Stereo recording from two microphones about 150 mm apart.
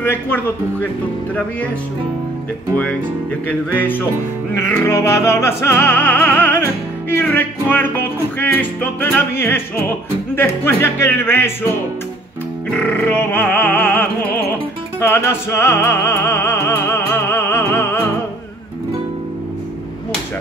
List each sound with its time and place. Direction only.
0.0 s music: 10° left (ahead or behind)
2.7 s music: 10° left (ahead or behind)
12.7 s music: 10° left (ahead or behind)